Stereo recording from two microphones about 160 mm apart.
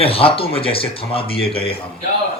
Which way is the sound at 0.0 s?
35° left (ahead or behind).